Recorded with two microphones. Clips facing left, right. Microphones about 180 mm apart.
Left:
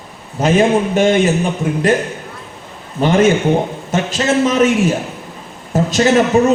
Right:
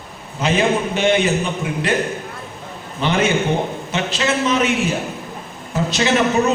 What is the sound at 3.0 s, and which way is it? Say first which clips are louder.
A man's voice: left 6 dB; 45° left (ahead or behind).